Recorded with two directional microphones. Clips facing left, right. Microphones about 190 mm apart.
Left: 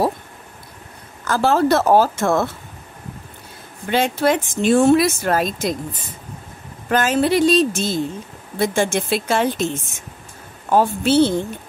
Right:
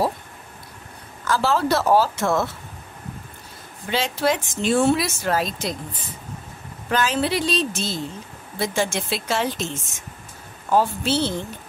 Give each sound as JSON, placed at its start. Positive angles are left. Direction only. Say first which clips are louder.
{"t": 1.2, "sound": "speech", "louder": "left 4 dB", "side_deg": 50}
{"t": 3.9, "sound": "speech", "louder": "left 5 dB", "side_deg": 55}
{"t": 6.9, "sound": "speech", "louder": "left 5 dB", "side_deg": 50}
{"t": 10.7, "sound": "a woman's voice", "louder": "left 4 dB", "side_deg": 55}